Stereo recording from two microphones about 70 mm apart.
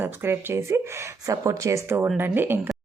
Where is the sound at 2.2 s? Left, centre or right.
Right.